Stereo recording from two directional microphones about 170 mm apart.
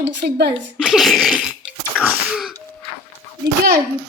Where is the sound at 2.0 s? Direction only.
5° right (ahead or behind).